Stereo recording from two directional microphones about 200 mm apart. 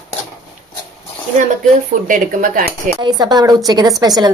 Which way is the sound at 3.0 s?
20° right (ahead or behind).